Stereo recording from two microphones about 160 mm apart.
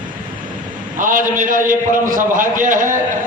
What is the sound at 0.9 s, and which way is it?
A man's voice, 55° right (ahead or behind).